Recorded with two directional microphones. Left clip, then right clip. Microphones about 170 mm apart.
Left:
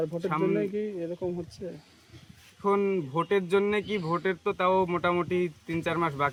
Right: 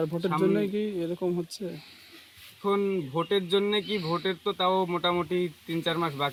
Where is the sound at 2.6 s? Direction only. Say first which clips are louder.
Left 1 dB; 20° left (ahead or behind).